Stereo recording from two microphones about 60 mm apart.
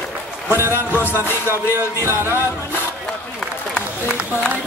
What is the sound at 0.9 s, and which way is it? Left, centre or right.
Music, left.